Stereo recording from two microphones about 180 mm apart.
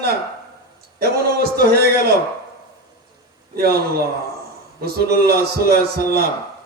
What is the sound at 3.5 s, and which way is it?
Speech, 60° right (ahead or behind).